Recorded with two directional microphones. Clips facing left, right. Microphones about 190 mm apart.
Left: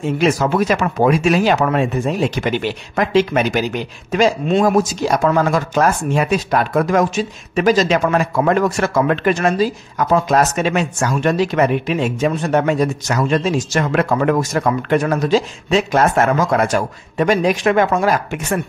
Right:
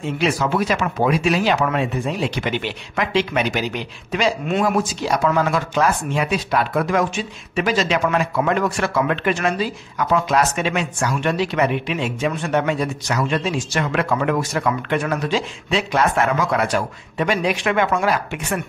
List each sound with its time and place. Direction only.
0.0 s speech: 45° left (ahead or behind)